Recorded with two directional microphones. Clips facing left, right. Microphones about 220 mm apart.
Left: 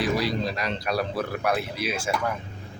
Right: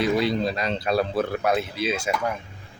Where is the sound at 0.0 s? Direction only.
25° right (ahead or behind).